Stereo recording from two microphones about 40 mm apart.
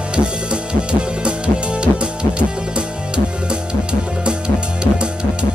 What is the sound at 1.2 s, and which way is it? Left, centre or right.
Music, right.